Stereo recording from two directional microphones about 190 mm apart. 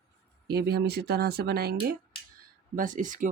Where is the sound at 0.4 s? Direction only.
55° right (ahead or behind).